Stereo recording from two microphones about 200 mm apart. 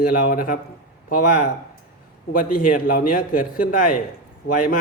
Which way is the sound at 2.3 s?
45° left (ahead or behind).